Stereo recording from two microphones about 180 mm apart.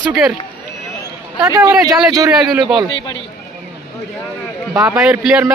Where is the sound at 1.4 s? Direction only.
20° right (ahead or behind).